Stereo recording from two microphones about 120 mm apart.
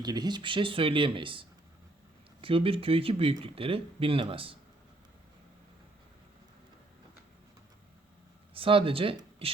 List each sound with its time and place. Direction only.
0.0 s speech: 35° right (ahead or behind)
8.5 s speech: 50° right (ahead or behind)